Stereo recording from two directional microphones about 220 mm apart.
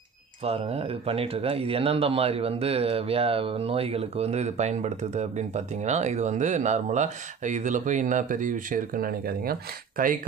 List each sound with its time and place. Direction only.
0.4 s speech: 25° right (ahead or behind)